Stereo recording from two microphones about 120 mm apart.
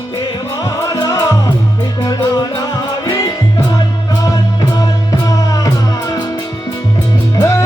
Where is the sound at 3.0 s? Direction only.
30° left (ahead or behind).